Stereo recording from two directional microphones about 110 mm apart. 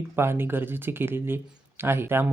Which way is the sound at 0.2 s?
20° right (ahead or behind).